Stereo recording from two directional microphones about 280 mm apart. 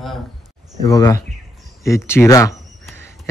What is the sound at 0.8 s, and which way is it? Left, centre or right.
A man's voice, centre.